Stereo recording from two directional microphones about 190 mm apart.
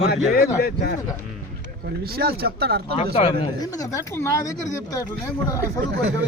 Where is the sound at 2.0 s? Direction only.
55° right (ahead or behind).